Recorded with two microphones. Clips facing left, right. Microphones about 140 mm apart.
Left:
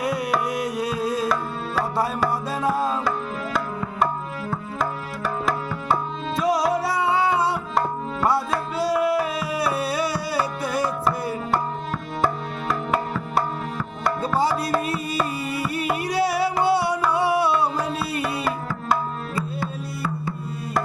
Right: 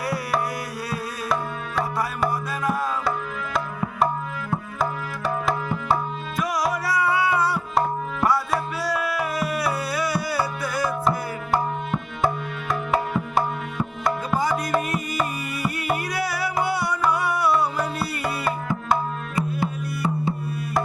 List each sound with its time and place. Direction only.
0.5 s music: 20° left (ahead or behind)
2.5 s music: 25° left (ahead or behind)
4.8 s music: centre (ahead or behind)
6.3 s music: 25° left (ahead or behind)
8.8 s music: 25° left (ahead or behind)
15.1 s music: 30° left (ahead or behind)
19.4 s music: 20° right (ahead or behind)